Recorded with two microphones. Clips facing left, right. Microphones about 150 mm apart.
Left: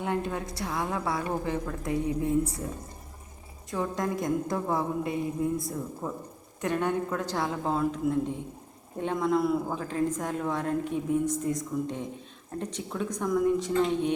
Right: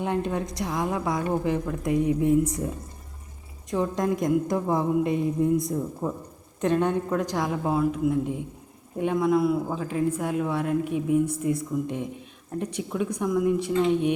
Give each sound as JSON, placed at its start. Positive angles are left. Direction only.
{"t": 0.0, "sound": "a woman's voice", "side_deg": -20}
{"t": 3.7, "sound": "a woman's voice", "side_deg": -20}